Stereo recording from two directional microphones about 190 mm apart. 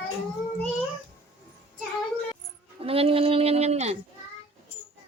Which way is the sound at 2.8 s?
30° right (ahead or behind).